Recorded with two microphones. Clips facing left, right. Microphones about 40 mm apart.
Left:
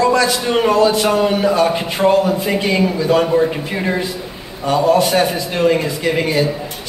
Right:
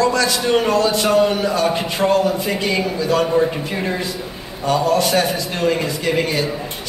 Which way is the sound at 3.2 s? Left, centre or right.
Centre.